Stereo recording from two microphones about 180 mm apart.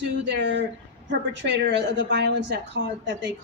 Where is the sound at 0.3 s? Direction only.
75° right (ahead or behind).